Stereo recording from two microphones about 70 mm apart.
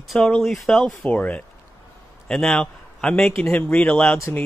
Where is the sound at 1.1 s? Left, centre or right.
Left.